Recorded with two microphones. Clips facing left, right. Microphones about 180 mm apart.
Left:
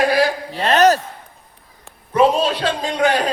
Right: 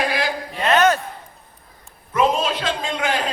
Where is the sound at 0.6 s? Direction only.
35° left (ahead or behind).